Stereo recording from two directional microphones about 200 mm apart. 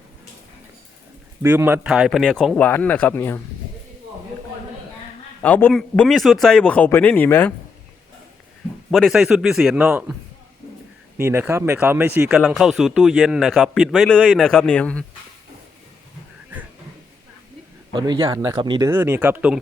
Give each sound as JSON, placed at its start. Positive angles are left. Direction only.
{"t": 1.4, "sound": "a man's voice", "side_deg": -10}
{"t": 5.4, "sound": "a man's voice", "side_deg": 10}
{"t": 8.9, "sound": "a man's voice", "side_deg": 0}
{"t": 11.2, "sound": "a man's voice", "side_deg": -10}
{"t": 17.9, "sound": "speech", "side_deg": -20}